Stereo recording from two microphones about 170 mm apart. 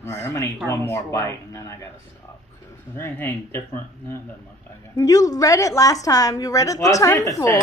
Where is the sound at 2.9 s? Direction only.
15° left (ahead or behind).